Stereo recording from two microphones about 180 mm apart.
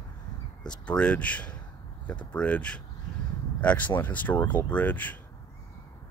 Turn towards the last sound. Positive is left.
turn(degrees=10)  # may be behind; listen again after turning